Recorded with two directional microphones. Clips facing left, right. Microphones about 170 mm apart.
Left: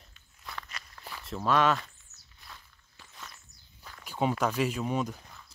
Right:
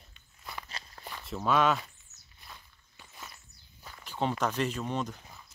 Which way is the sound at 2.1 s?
50° left (ahead or behind).